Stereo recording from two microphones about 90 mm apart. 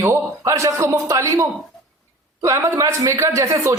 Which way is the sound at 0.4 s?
35° right (ahead or behind).